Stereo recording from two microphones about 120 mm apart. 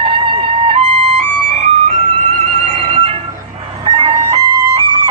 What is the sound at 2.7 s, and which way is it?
Music, 55° right (ahead or behind).